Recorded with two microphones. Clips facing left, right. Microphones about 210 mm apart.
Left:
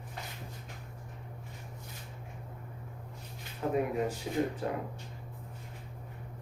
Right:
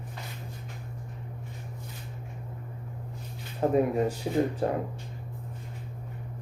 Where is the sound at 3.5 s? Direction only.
40° right (ahead or behind).